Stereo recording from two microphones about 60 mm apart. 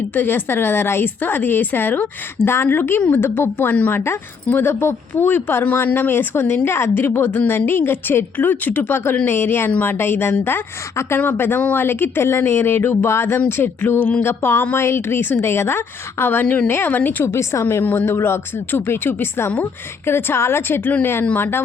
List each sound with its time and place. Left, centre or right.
0.1 s a woman's voice: left
9.7 s speech: left
10.0 s a woman's voice: left
14.6 s a woman's voice: left
14.8 s a woman's voice: left
17.2 s a woman's voice: left